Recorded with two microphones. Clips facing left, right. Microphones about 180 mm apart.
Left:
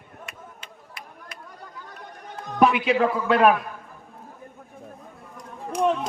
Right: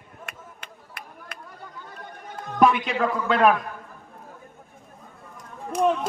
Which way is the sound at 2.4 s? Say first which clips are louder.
Even; 5° left (ahead or behind).